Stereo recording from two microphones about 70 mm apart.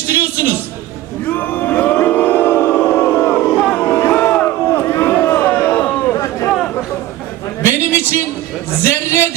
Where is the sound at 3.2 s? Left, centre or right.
Centre.